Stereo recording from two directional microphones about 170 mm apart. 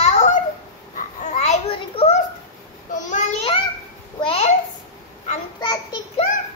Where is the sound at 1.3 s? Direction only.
40° left (ahead or behind).